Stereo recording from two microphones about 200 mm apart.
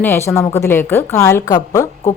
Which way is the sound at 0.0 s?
10° left (ahead or behind).